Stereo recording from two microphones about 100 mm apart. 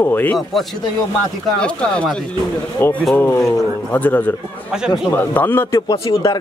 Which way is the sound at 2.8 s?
20° left (ahead or behind).